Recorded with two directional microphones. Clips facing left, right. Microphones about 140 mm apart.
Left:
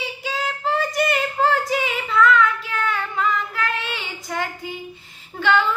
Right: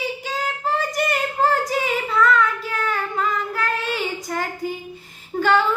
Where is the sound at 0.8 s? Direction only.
40° right (ahead or behind).